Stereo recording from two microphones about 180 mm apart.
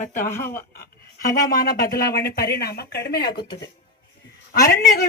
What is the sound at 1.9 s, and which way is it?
Speech, 55° left (ahead or behind).